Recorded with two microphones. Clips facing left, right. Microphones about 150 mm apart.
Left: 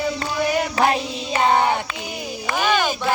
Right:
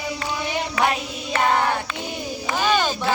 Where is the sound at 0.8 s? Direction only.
35° left (ahead or behind).